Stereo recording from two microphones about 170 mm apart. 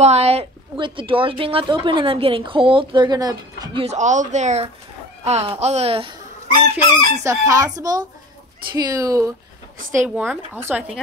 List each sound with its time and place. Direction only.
0.0 s a woman's voice: 40° right (ahead or behind); by 3.8 s 20° right (ahead or behind)
3.8 s a woman's voice: 45° right (ahead or behind)
7.2 s a woman's voice: 20° right (ahead or behind)
9.8 s speech: 50° right (ahead or behind)
10.0 s speech: 5° right (ahead or behind)